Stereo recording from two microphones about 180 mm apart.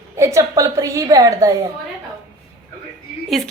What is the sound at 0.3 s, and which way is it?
A woman's voice, 20° right (ahead or behind).